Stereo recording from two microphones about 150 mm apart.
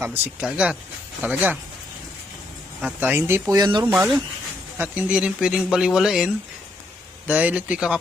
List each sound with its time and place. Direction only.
0.0 s speech: 15° right (ahead or behind)
3.0 s speech: 15° right (ahead or behind); by 4.0 s 30° right (ahead or behind)
4.8 s speech: 10° right (ahead or behind)